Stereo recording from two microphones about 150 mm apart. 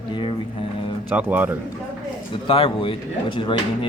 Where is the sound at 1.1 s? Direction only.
10° right (ahead or behind).